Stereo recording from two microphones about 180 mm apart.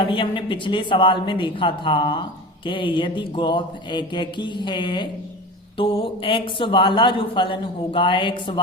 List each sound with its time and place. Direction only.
0.0 s a man's voice: 25° left (ahead or behind)